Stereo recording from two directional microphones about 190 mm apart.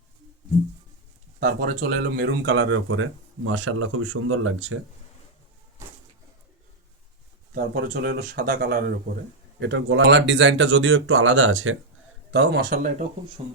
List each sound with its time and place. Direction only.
1.4 s speech: 50° right (ahead or behind); by 4.8 s 90° right
7.5 s speech: 55° right (ahead or behind)
9.6 s speech: 70° right (ahead or behind); by 11.8 s 90° right
12.3 s speech: 65° right (ahead or behind); by 13.1 s 45° right (ahead or behind)